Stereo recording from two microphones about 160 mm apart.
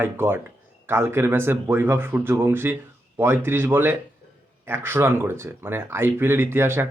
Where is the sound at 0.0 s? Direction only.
15° right (ahead or behind).